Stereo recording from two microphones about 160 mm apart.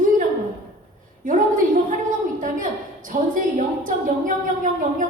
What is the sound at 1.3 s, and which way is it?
A woman's voice, 55° right (ahead or behind).